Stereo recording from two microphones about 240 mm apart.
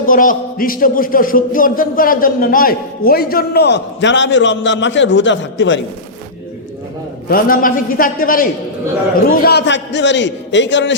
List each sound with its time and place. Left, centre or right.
0.0 s a man's voice: left
7.3 s a man's voice: left